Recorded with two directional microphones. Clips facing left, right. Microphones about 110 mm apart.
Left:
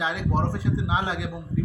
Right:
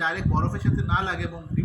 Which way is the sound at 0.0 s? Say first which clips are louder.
Even; 10° left (ahead or behind).